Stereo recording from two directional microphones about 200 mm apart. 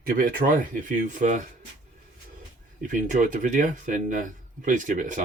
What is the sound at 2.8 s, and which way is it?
Speech, 40° right (ahead or behind).